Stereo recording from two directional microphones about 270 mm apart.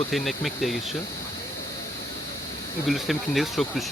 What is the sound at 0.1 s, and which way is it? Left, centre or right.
Speech, centre.